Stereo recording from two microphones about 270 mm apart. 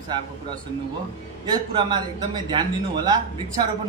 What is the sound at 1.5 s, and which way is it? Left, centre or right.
Speech, centre.